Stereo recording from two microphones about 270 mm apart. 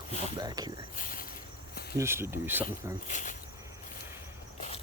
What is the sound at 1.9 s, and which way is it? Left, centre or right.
Speech, centre.